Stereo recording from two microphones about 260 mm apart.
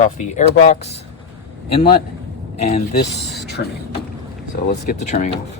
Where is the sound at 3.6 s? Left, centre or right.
Left.